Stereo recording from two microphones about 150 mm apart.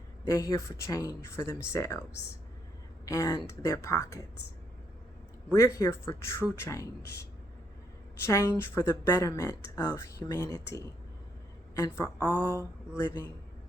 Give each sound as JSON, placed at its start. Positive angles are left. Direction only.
{"t": 0.3, "sound": "speech", "side_deg": 20}
{"t": 3.1, "sound": "speech", "side_deg": 25}
{"t": 5.5, "sound": "a woman's voice", "side_deg": 20}